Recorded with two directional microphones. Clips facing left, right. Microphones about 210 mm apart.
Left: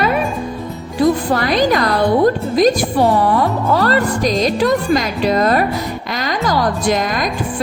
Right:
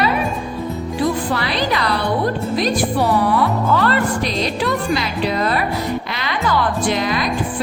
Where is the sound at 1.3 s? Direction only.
45° left (ahead or behind).